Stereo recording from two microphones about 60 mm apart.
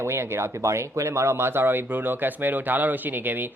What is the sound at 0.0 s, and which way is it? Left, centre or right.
A man's voice, right.